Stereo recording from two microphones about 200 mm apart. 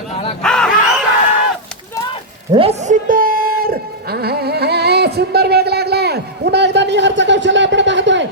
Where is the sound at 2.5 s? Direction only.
30° right (ahead or behind); by 8.2 s 65° right (ahead or behind).